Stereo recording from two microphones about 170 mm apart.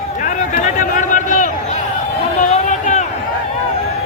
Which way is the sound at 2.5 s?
45° left (ahead or behind).